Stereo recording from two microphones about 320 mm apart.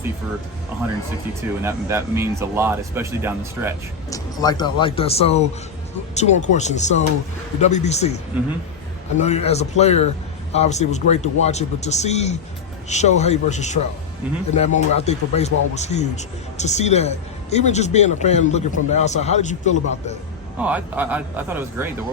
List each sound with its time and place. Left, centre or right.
1.4 s speech: centre
4.1 s speech: centre
9.1 s speech: left
20.6 s a man's voice: centre